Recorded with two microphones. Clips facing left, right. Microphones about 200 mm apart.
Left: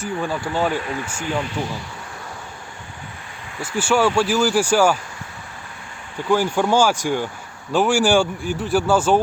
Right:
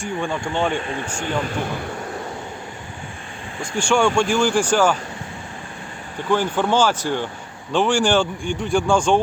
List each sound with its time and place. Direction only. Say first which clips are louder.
0.0 s speech: even; 5° left (ahead or behind)
0.8 s speech: even; 25° right (ahead or behind)
1.5 s speech: right 1 dB; 55° right (ahead or behind)
3.6 s speech: even; 5° left (ahead or behind)
6.3 s speech: left 1 dB; 10° left (ahead or behind)